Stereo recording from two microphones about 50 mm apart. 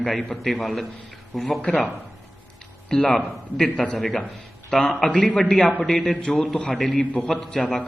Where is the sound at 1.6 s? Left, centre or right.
Left.